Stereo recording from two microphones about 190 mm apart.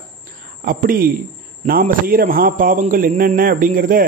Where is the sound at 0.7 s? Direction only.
50° right (ahead or behind).